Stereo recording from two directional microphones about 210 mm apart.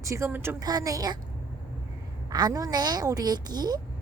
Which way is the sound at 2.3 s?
15° right (ahead or behind).